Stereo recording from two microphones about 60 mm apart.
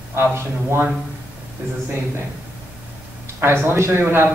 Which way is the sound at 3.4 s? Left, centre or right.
Right.